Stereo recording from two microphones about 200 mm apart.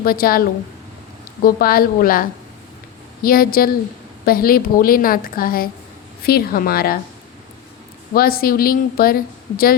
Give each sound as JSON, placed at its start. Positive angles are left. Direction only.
{"t": 0.0, "sound": "a woman's voice", "side_deg": 50}
{"t": 8.1, "sound": "a woman's voice", "side_deg": 50}